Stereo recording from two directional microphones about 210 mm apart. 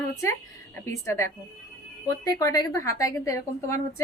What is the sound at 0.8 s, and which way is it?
A woman's voice, 15° left (ahead or behind).